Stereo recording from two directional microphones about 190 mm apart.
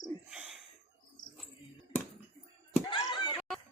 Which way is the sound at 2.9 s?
25° left (ahead or behind).